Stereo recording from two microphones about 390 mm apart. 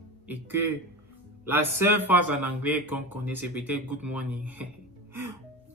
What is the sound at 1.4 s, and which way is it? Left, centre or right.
A man's voice, centre.